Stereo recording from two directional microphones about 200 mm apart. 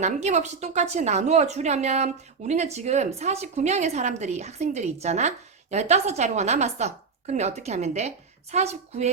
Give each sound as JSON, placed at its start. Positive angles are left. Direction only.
{"t": 0.0, "sound": "a woman's voice", "side_deg": -35}